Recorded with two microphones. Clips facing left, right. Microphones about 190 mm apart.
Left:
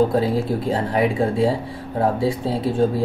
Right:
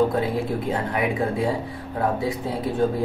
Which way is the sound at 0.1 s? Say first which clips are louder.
Left 4 dB; 30° left (ahead or behind).